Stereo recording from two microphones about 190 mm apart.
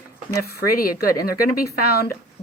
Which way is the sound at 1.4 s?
50° left (ahead or behind).